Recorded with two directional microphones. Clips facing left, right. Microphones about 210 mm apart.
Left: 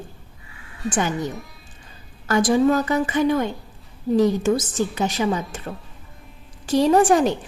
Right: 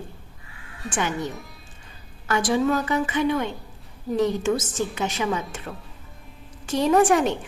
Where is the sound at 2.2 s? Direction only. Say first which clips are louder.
Left 4 dB; 40° left (ahead or behind).